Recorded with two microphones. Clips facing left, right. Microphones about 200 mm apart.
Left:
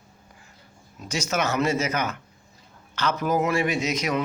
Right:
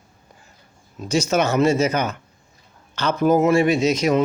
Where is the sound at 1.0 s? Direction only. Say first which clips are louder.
Right 7 dB; 30° right (ahead or behind).